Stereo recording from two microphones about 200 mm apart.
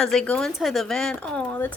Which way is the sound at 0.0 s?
5° left (ahead or behind).